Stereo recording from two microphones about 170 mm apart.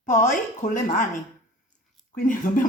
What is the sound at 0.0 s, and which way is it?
Speech, 45° left (ahead or behind).